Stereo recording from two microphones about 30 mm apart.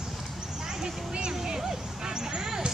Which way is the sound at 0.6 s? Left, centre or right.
Right.